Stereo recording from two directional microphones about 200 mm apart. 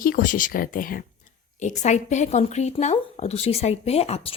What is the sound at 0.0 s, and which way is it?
A woman's voice, 45° left (ahead or behind).